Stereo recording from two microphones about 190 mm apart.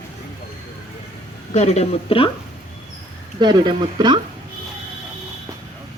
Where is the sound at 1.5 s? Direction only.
35° left (ahead or behind).